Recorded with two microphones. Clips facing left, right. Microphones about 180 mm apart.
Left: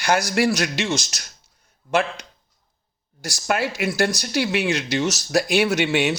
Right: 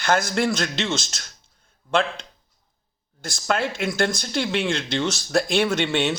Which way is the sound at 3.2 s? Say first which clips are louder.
Left 1 dB; 10° left (ahead or behind).